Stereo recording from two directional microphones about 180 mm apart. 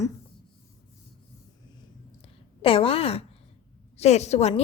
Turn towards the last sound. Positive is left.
turn(degrees=35)  # may be behind; listen again after turning